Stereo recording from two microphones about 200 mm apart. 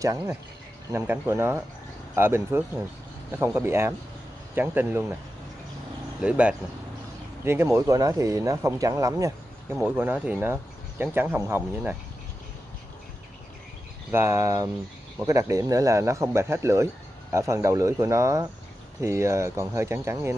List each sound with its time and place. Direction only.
0.0 s speech: 15° right (ahead or behind)
6.2 s speech: 5° right (ahead or behind)
14.1 s speech: 10° right (ahead or behind)